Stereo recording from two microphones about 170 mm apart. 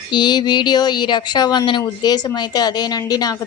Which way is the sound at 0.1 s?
25° left (ahead or behind).